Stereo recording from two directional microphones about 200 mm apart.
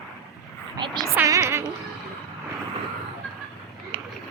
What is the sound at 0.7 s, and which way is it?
Speech, 25° right (ahead or behind).